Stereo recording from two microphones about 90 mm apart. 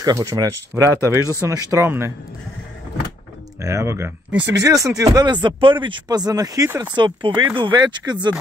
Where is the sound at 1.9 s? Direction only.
25° right (ahead or behind).